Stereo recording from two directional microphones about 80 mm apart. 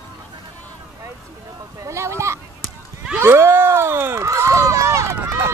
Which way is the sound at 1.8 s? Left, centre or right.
Right.